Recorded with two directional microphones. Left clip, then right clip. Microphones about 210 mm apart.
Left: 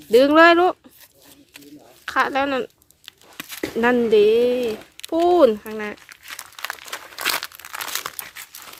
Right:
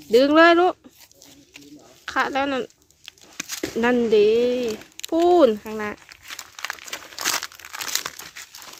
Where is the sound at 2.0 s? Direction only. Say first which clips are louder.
Left 2 dB; centre (ahead or behind).